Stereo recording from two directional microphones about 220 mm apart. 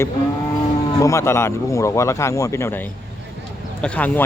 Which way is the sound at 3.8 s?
5° left (ahead or behind).